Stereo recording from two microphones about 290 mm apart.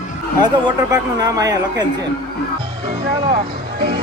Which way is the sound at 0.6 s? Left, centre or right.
Centre.